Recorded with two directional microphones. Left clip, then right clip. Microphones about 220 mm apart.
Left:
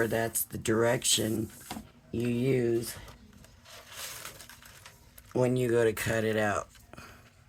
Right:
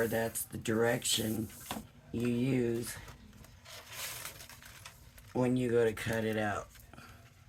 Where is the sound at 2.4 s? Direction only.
40° left (ahead or behind).